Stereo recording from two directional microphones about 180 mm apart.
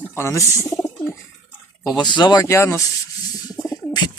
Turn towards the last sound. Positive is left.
turn(degrees=20)  # may be behind; listen again after turning